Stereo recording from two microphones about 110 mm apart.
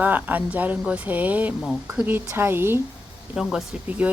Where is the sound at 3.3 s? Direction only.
5° right (ahead or behind).